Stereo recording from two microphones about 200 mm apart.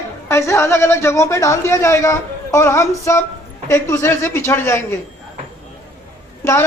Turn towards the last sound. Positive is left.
turn(degrees=15)  # may be behind; listen again after turning